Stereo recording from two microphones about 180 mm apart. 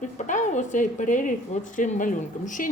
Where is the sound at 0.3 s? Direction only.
45° left (ahead or behind).